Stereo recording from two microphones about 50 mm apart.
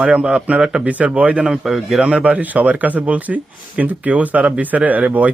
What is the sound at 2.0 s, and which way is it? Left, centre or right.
Speech, right.